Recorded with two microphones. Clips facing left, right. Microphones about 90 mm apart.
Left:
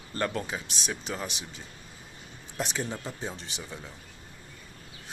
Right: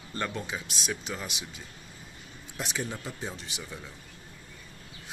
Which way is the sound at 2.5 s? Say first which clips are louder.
Left 2 dB; 35° left (ahead or behind).